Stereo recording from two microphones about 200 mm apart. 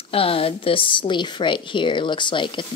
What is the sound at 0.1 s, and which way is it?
A woman's voice, 30° left (ahead or behind).